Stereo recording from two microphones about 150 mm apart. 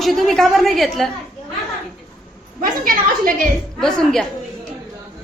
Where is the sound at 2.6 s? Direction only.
70° right (ahead or behind).